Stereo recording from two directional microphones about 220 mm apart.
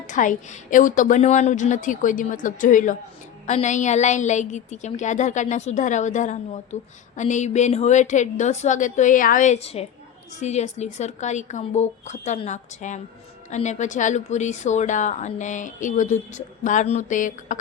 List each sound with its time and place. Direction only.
0.1 s speech: 35° left (ahead or behind)